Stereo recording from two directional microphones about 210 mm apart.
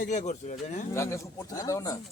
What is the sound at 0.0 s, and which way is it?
Speech, 35° left (ahead or behind).